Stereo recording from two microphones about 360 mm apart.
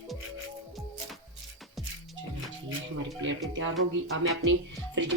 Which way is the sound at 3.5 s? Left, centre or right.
Right.